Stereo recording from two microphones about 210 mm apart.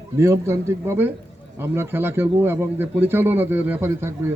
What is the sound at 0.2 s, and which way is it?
A man's voice, 10° right (ahead or behind).